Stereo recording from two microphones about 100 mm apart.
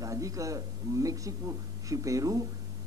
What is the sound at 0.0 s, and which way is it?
A man's voice, 35° right (ahead or behind).